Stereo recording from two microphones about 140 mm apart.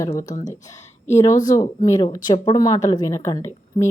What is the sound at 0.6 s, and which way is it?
A woman's voice, 20° left (ahead or behind).